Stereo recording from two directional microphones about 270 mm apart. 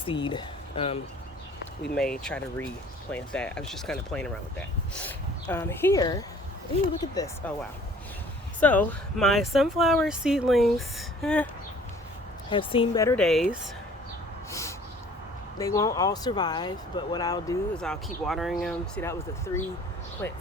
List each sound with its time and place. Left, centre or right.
0.0 s speech: centre
1.8 s speech: centre
8.6 s speech: centre
12.5 s speech: centre
14.5 s a sound: centre
15.5 s speech: centre
20.2 s speech: centre